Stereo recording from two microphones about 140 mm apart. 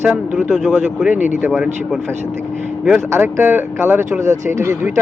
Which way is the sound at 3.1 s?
20° right (ahead or behind).